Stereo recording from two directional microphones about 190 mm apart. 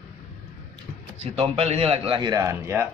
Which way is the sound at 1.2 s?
30° right (ahead or behind).